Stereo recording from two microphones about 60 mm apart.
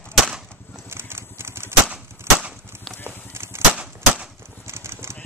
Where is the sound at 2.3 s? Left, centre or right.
Right.